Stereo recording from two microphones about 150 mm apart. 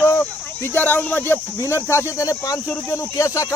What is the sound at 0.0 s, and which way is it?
Speech, 15° left (ahead or behind).